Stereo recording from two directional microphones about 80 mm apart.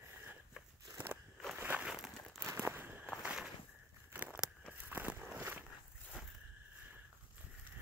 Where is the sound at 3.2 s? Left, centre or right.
Centre.